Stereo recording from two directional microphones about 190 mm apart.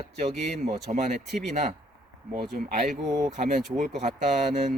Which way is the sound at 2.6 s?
40° right (ahead or behind).